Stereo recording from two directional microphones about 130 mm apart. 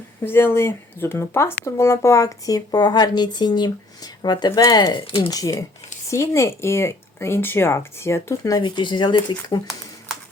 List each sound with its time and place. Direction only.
0.3 s speech: 20° left (ahead or behind); by 9.6 s 35° left (ahead or behind)